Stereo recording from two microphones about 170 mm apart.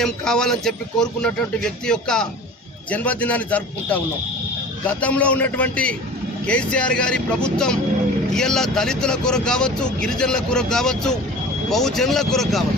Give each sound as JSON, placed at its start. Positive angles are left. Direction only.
{"t": 0.0, "sound": "a man's voice", "side_deg": 5}